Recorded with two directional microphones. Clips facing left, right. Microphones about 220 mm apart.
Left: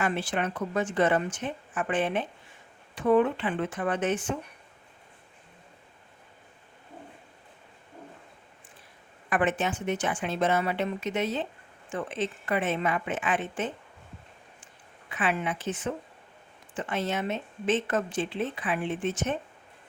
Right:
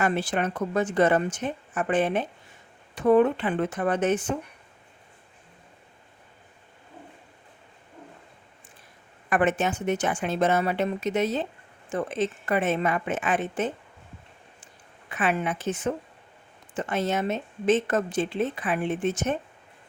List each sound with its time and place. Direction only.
0.0 s a woman's voice: 40° right (ahead or behind)
9.3 s a woman's voice: 45° right (ahead or behind)
15.1 s a woman's voice: 45° right (ahead or behind)